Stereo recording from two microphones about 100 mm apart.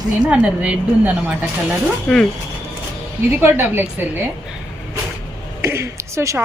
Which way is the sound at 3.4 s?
20° right (ahead or behind).